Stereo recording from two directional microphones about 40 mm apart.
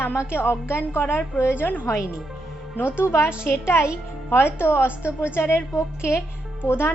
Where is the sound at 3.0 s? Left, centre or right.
Left.